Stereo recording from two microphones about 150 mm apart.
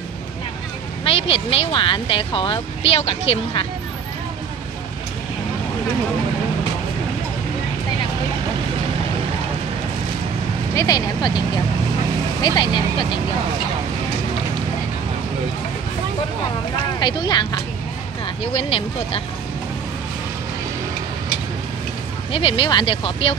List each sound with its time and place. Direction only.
1.0 s speech: 40° left (ahead or behind)
10.7 s speech: 20° left (ahead or behind)
17.0 s speech: 30° left (ahead or behind)
18.4 s speech: 40° left (ahead or behind)
22.3 s speech: 35° left (ahead or behind)